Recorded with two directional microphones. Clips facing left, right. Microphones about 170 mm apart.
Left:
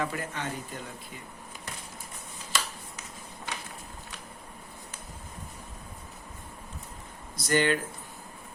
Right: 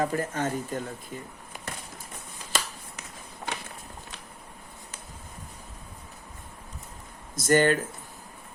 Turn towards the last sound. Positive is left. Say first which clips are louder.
# right 4 dB
turn(degrees=-45)  # may be behind; listen again after turning